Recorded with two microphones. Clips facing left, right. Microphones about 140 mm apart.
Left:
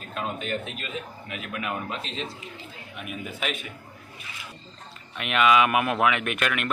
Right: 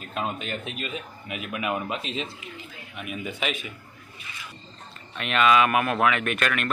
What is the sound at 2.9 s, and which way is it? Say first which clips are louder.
Speech: right 2 dB; centre (ahead or behind).